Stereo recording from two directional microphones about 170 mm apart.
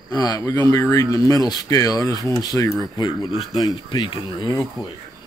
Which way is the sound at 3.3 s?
Centre (ahead or behind).